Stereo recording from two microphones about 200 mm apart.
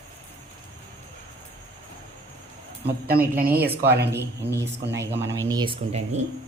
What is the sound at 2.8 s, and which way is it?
Speech, 55° right (ahead or behind).